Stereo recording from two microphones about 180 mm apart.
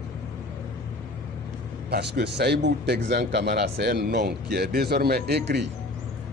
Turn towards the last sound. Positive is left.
turn(degrees=-70)  # may be behind; listen again after turning